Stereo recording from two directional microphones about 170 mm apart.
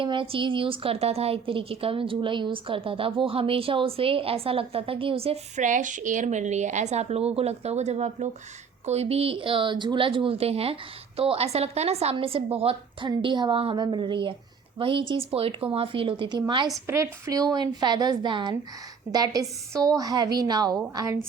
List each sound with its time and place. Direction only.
0.0 s a woman's voice: 30° right (ahead or behind)
16.8 s a woman's voice: 15° right (ahead or behind)